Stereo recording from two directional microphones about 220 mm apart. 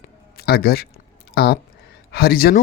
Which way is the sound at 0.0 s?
45° left (ahead or behind).